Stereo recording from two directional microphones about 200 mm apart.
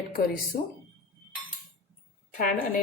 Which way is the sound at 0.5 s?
35° left (ahead or behind).